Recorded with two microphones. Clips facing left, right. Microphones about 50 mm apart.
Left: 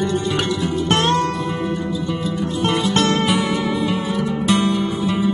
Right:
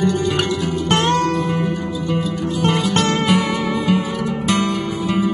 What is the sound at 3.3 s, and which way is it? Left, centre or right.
Music, right.